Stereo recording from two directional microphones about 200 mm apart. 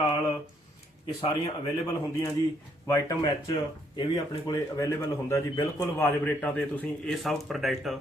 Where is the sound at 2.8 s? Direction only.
15° left (ahead or behind).